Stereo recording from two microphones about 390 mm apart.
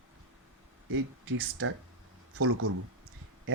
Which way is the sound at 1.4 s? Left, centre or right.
Right.